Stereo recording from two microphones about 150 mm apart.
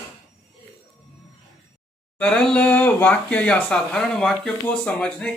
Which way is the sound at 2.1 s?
5° left (ahead or behind).